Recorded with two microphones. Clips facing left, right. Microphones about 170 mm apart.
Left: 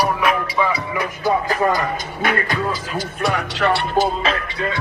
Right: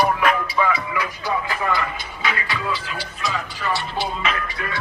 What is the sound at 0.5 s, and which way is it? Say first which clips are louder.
Music: left 1 dB; 20° left (ahead or behind).